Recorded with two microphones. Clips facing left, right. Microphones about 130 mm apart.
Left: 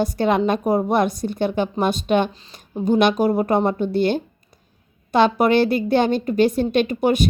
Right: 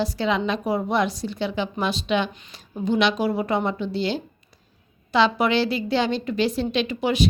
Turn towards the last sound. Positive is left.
turn(degrees=50)  # may be behind; listen again after turning